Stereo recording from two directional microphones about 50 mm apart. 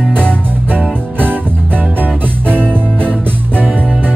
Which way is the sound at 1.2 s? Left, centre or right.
Right.